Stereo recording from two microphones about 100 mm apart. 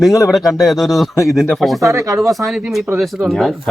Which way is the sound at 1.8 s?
30° right (ahead or behind).